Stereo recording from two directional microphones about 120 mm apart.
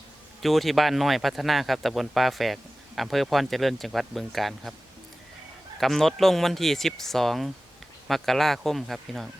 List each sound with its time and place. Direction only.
0.4 s speech: centre (ahead or behind)
5.8 s speech: centre (ahead or behind)